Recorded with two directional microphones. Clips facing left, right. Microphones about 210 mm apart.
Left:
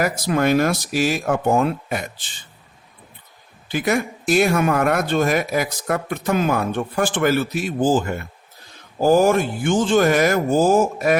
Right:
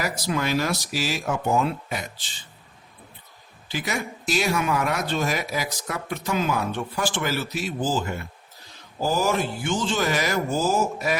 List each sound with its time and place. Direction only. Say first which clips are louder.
0.0 s speech: left 7 dB; 55° left (ahead or behind)
3.7 s speech: left 8 dB; 55° left (ahead or behind)